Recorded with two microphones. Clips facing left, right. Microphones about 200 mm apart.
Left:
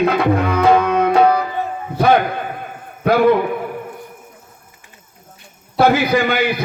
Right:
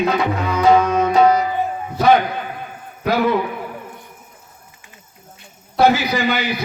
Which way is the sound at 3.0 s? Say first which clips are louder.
Left 5 dB; 55° left (ahead or behind).